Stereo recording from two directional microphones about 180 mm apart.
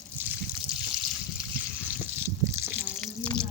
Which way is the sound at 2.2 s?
15° right (ahead or behind).